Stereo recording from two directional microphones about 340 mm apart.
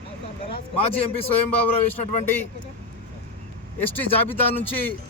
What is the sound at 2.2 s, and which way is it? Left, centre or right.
Speech, centre.